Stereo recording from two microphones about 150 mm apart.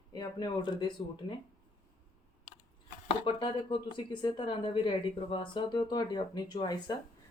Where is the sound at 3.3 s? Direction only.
35° left (ahead or behind).